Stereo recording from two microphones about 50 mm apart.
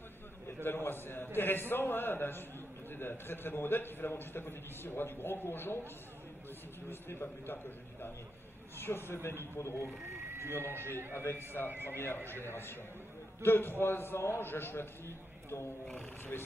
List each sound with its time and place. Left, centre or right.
0.7 s a man's voice: left
6.9 s a man's voice: left
9.6 s speech: left
10.6 s a man's voice: right
11.1 s a man's voice: left
11.7 s speech: right
12.4 s a man's voice: left